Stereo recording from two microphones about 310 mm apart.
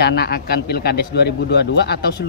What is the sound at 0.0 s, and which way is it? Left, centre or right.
Speech, left.